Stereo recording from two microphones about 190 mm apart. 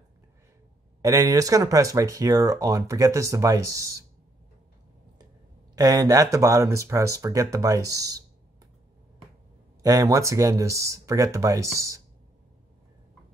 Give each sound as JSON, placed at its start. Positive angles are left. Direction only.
{"t": 1.0, "sound": "speech", "side_deg": -20}
{"t": 5.8, "sound": "speech", "side_deg": -20}
{"t": 9.8, "sound": "speech", "side_deg": -20}